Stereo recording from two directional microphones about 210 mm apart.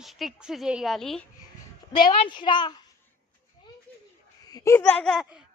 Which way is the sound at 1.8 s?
20° left (ahead or behind).